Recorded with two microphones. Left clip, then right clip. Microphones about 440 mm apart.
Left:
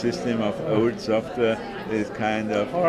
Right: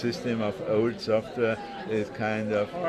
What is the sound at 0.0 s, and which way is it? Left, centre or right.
A man's voice, right.